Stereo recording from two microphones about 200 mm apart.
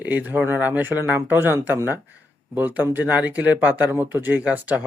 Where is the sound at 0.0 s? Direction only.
10° right (ahead or behind).